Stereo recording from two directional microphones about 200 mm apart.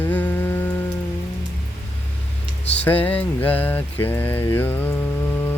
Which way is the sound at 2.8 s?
10° left (ahead or behind).